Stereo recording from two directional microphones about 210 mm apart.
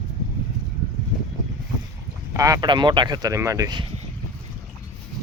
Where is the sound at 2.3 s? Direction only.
15° right (ahead or behind).